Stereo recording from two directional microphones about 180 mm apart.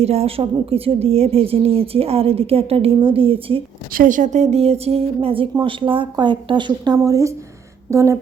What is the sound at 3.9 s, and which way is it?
A woman's voice, 45° right (ahead or behind).